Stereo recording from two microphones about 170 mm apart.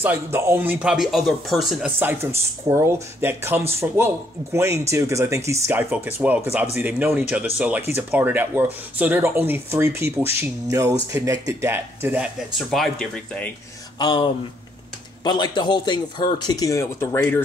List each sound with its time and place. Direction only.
0.0 s speech: 15° right (ahead or behind)
2.0 s speech: 15° right (ahead or behind)
12.5 s speech: centre (ahead or behind)
13.9 s a man's voice: 25° left (ahead or behind)